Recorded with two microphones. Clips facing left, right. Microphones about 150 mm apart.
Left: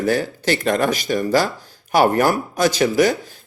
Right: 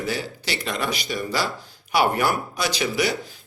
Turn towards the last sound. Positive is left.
turn(degrees=45)  # may be behind; listen again after turning